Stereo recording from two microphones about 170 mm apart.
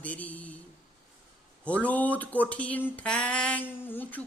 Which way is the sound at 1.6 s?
10° left (ahead or behind).